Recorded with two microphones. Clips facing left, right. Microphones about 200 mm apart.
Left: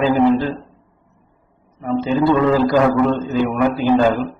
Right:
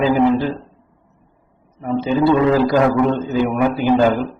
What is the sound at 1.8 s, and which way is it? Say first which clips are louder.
A man's voice: even; 10° right (ahead or behind).